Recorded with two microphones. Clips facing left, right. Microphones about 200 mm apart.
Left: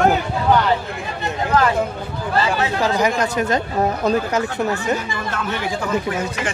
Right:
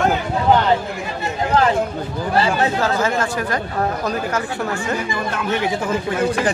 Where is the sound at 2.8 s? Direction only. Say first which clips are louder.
Left 1 dB; 15° left (ahead or behind).